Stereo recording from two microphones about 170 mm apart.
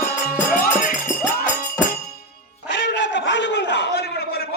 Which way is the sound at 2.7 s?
90° left.